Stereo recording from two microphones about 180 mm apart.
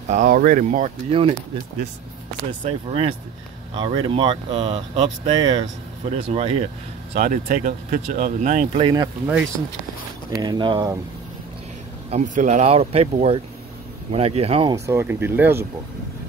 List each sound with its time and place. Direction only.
0.1 s speech: 50° right (ahead or behind)
2.6 s speech: 30° right (ahead or behind)
7.2 s speech: 45° right (ahead or behind)
8.8 s speech: 20° right (ahead or behind)
10.3 s speech: 20° right (ahead or behind)
12.1 s speech: 40° right (ahead or behind)
14.9 s speech: 15° right (ahead or behind)